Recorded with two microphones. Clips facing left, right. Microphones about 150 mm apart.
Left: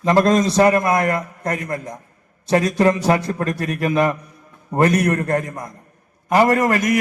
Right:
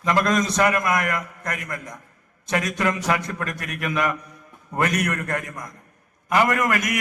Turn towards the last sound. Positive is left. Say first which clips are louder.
# left 6 dB
turn(degrees=30)  # may be behind; listen again after turning